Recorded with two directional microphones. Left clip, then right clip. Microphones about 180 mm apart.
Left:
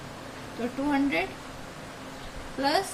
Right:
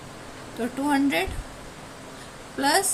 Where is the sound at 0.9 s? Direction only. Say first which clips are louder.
Right 4 dB; 60° right (ahead or behind).